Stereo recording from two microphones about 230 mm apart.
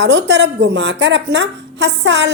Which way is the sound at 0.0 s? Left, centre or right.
Right.